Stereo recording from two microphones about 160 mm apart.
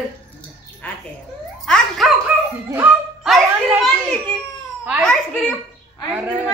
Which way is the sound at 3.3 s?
Centre (ahead or behind).